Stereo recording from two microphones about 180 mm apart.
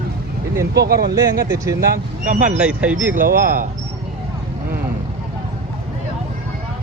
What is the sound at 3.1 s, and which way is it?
Speech, 50° right (ahead or behind).